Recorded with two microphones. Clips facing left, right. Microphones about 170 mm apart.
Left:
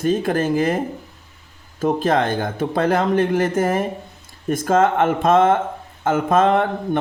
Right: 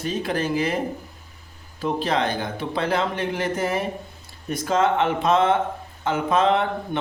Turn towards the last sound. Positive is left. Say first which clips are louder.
# left 3 dB
turn(degrees=50)  # may be behind; listen again after turning